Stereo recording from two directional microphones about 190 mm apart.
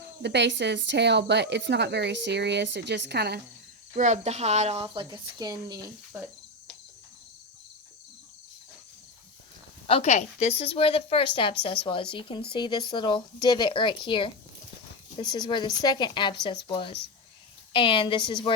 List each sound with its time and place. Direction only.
0.2 s a woman's voice: 65° right (ahead or behind)
3.9 s speech: 35° right (ahead or behind); by 5.8 s 20° right (ahead or behind)
9.8 s a woman's voice: 30° left (ahead or behind)